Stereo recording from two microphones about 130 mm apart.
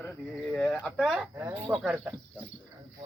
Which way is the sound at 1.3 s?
25° right (ahead or behind).